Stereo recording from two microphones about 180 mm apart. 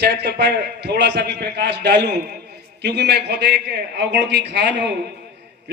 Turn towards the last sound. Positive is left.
turn(degrees=-70)  # may be behind; listen again after turning